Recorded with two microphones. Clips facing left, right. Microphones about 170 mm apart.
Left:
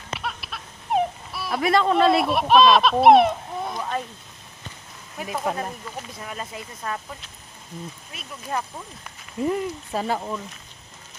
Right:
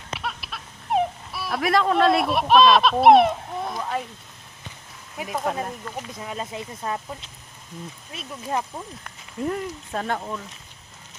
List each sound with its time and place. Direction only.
0.1 s a sound: centre (ahead or behind)
5.3 s speech: centre (ahead or behind)
6.1 s speech: 20° right (ahead or behind)
9.0 s speech: 5° left (ahead or behind)